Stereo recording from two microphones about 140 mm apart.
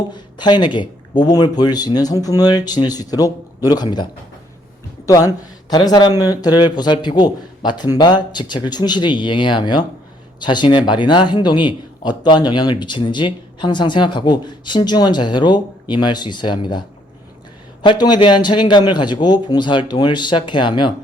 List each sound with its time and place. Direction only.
0.1 s speech: 30° left (ahead or behind)
5.0 s speech: 25° left (ahead or behind)
17.8 s speech: 30° left (ahead or behind)